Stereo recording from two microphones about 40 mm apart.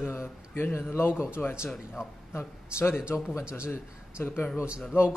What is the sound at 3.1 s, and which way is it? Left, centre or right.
Speech, left.